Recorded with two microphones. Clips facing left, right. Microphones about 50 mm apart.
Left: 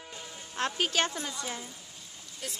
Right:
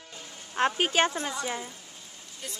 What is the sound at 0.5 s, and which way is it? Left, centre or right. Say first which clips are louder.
Speech: right 5 dB; right.